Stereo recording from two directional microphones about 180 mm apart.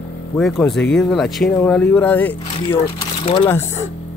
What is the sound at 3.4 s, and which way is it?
Speech, 15° left (ahead or behind).